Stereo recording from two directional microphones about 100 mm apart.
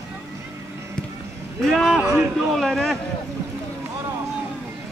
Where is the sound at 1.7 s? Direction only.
5° right (ahead or behind).